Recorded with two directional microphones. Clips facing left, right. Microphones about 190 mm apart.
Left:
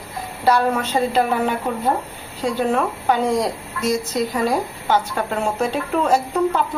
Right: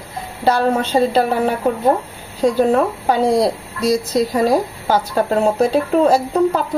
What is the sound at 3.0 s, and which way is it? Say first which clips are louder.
A woman's voice: right 3 dB; 35° right (ahead or behind).